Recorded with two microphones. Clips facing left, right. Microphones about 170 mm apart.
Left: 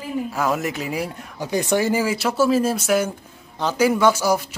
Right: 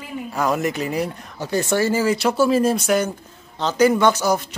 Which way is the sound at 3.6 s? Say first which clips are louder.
Right 1 dB; 10° left (ahead or behind).